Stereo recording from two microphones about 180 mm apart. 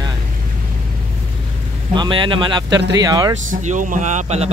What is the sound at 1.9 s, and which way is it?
Speech, 25° right (ahead or behind).